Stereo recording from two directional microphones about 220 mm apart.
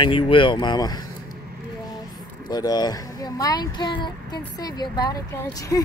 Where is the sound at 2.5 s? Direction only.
15° left (ahead or behind).